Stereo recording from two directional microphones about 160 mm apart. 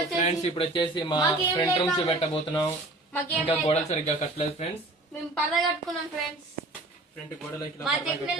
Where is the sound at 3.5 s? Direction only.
40° left (ahead or behind).